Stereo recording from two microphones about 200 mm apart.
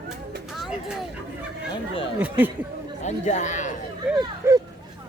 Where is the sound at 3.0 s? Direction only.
35° left (ahead or behind).